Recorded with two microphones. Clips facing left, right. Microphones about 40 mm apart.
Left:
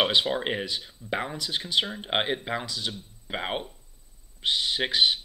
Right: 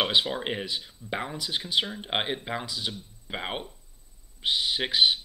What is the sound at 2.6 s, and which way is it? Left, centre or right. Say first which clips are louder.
Speech: even; centre.